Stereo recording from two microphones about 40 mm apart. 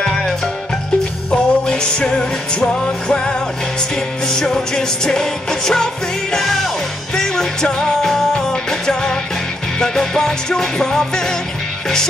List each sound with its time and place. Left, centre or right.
1.3 s music: left
4.5 s music: centre
9.8 s music: centre